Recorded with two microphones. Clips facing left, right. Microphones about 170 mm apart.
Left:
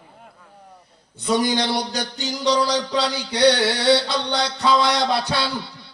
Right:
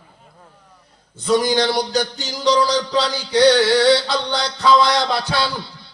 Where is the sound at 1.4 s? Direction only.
60° left (ahead or behind).